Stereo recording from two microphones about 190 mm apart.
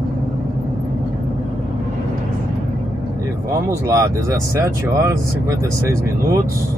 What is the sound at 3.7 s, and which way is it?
Speech, 15° right (ahead or behind).